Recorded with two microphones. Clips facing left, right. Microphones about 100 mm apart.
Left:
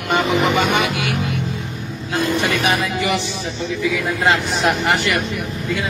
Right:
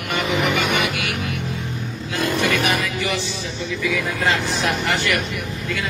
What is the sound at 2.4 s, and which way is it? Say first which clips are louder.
Speech: even; 20° left (ahead or behind).